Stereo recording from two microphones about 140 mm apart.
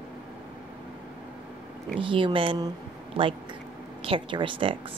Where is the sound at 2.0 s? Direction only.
35° right (ahead or behind).